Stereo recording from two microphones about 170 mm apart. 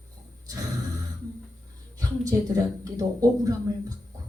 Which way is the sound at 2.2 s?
20° right (ahead or behind).